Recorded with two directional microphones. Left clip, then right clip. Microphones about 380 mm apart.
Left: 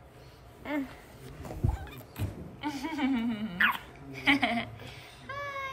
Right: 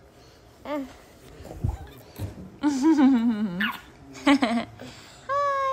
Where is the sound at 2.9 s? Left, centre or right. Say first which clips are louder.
Right 12 dB; right.